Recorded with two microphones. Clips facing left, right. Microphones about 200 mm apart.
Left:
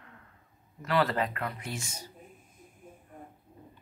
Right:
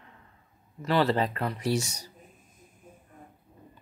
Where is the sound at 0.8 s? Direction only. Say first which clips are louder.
Right 3 dB; 30° right (ahead or behind).